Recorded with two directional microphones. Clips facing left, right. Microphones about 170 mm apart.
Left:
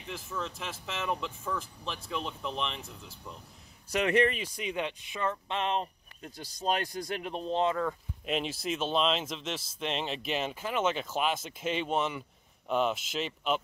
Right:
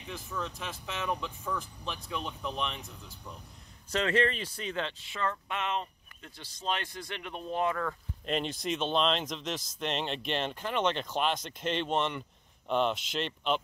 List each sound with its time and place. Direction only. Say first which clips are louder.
0.1 s speech: even; centre (ahead or behind)
3.9 s speech: left 2 dB; 15° left (ahead or behind)
5.6 s speech: left 4 dB; 35° left (ahead or behind)
8.3 s speech: even; 5° left (ahead or behind)